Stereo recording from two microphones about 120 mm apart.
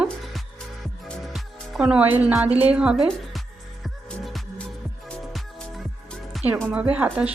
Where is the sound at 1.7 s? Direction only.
10° right (ahead or behind).